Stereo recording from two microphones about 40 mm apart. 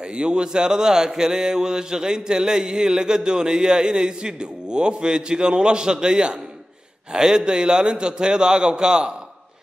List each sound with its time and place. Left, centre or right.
0.1 s speech: right